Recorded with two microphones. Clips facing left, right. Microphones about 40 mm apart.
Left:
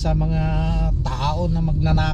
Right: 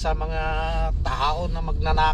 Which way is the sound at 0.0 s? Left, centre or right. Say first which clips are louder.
Left 3 dB; right.